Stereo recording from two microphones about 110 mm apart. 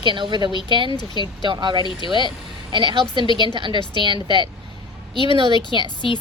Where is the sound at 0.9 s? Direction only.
45° left (ahead or behind).